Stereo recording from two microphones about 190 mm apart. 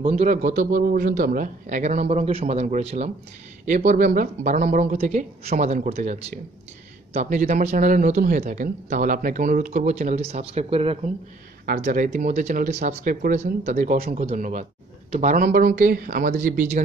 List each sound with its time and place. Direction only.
0.0 s speech: 40° right (ahead or behind)
11.6 s speech: 45° right (ahead or behind)